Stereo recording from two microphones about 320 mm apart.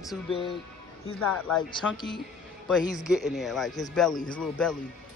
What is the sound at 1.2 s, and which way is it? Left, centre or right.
Speech, centre.